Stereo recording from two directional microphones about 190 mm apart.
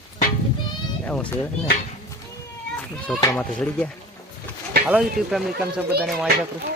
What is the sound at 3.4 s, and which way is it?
Speech, 5° left (ahead or behind).